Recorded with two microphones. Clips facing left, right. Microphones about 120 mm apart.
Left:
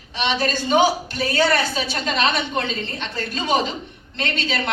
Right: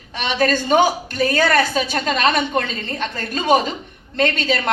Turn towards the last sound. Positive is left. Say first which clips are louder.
# right 6 dB
turn(degrees=-45)  # may be behind; listen again after turning